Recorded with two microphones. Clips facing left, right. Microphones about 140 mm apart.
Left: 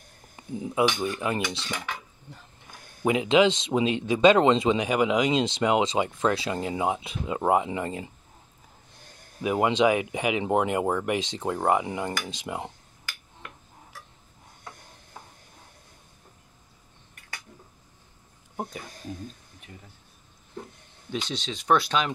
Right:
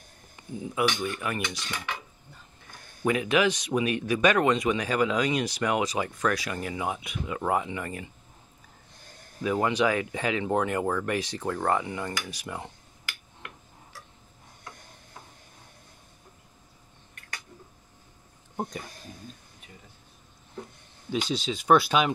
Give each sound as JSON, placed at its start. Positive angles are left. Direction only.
{"t": 0.4, "sound": "a sound", "side_deg": 30}
{"t": 1.0, "sound": "speech", "side_deg": 25}
{"t": 3.0, "sound": "speech", "side_deg": 20}
{"t": 9.4, "sound": "speech", "side_deg": 20}
{"t": 21.1, "sound": "speech", "side_deg": -5}